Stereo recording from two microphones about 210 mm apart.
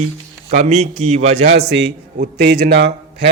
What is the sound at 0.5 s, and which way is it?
Speech, 35° right (ahead or behind).